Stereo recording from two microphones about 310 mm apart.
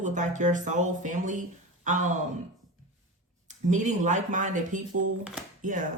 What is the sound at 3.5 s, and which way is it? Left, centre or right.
Speech, right.